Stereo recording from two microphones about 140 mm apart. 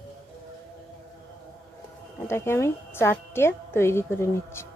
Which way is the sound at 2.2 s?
20° left (ahead or behind).